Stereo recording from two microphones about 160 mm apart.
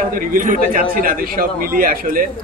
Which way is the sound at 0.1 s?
60° right (ahead or behind).